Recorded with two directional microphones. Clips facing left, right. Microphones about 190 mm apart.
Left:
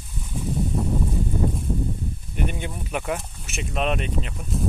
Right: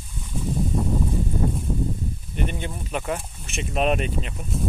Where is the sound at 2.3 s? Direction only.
10° left (ahead or behind).